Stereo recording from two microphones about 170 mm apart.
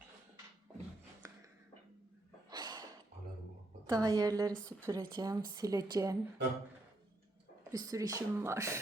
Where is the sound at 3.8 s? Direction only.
25° right (ahead or behind).